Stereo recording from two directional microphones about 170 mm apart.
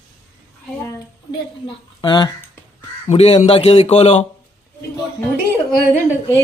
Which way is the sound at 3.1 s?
35° left (ahead or behind).